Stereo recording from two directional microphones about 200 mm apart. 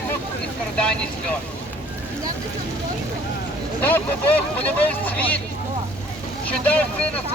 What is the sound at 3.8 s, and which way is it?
Speech, 10° left (ahead or behind).